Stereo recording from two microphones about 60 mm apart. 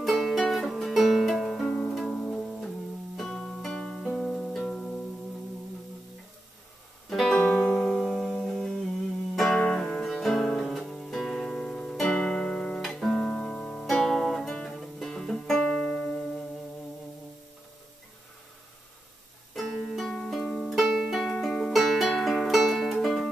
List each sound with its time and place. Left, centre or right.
0.0 s music: centre
3.2 s music: centre
7.1 s music: centre
7.6 s music: centre
13.8 s music: centre
19.5 s music: centre
20.8 s music: centre
21.5 s music: centre
21.7 s music: centre